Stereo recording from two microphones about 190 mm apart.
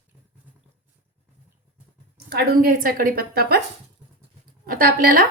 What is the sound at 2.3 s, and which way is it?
A woman's voice, 55° right (ahead or behind).